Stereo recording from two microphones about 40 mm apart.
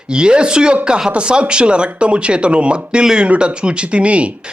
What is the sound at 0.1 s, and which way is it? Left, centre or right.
Speech, right.